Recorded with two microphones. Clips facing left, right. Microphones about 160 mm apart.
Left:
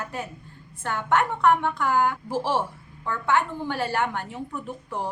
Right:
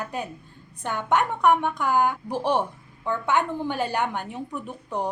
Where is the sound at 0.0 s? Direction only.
20° right (ahead or behind).